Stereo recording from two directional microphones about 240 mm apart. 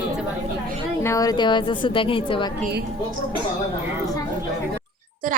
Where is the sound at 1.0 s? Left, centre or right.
Centre.